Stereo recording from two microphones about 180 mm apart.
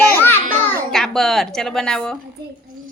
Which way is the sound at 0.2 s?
10° left (ahead or behind).